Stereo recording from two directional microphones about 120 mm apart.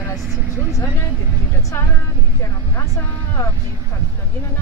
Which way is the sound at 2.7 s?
25° left (ahead or behind).